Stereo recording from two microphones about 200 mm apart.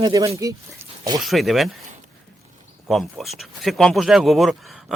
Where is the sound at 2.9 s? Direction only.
Centre (ahead or behind).